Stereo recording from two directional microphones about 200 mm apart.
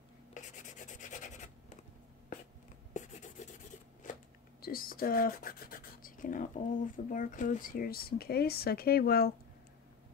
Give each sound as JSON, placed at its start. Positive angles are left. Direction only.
{"t": 0.3, "sound": "rub", "side_deg": 35}
{"t": 2.9, "sound": "writing", "side_deg": 35}
{"t": 4.1, "sound": "speech", "side_deg": 45}